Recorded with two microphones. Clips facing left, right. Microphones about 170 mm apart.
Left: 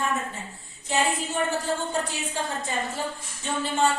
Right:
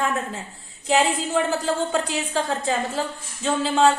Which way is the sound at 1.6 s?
90° right.